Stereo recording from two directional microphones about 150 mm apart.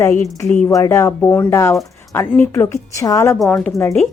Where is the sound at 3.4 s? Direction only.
5° left (ahead or behind).